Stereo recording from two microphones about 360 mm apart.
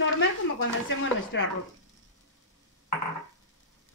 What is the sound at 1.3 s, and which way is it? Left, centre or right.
Speech, left.